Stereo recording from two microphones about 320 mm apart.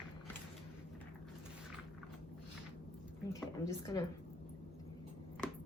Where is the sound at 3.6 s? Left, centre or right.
Centre.